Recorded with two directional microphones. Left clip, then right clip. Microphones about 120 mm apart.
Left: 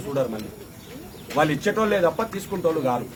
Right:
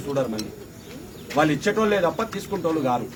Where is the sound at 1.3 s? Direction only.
25° left (ahead or behind).